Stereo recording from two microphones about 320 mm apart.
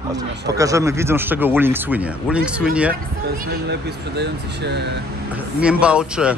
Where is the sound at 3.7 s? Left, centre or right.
Right.